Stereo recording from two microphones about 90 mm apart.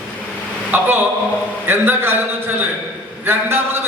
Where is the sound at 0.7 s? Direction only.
20° right (ahead or behind).